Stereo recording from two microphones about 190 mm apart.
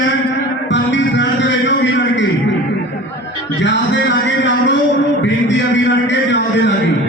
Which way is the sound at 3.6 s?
70° left (ahead or behind).